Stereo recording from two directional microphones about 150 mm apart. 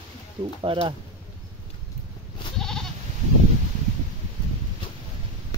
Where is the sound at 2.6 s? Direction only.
5° left (ahead or behind).